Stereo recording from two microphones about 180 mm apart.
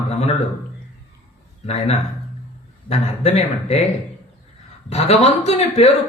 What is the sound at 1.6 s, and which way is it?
Speech, 35° left (ahead or behind).